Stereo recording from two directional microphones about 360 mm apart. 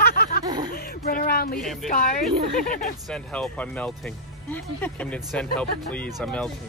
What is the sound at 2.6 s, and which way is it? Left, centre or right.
Speech, left.